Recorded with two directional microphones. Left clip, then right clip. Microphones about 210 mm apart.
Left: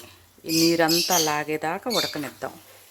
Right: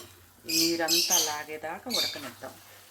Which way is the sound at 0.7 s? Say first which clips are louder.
Left 5 dB; 55° left (ahead or behind).